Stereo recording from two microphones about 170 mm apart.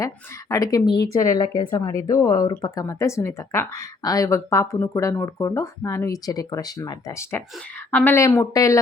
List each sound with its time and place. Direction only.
0.0 s speech: 20° left (ahead or behind)